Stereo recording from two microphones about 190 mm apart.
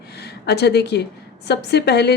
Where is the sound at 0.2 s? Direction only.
60° left (ahead or behind).